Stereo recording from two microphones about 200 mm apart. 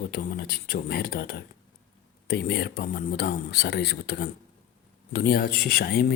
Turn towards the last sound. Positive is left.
turn(degrees=50)  # may be behind; listen again after turning